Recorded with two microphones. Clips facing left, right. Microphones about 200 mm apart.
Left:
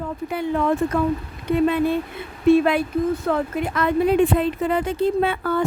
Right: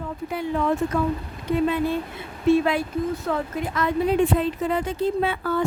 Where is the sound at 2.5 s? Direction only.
60° left (ahead or behind).